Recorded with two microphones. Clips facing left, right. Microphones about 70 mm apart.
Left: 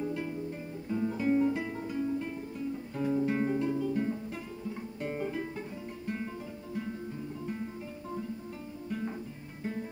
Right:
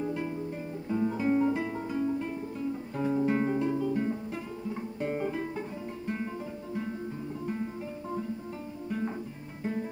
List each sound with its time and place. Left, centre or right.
0.0 s guitar: right
0.8 s music: right
3.0 s guitar: right
5.0 s music: centre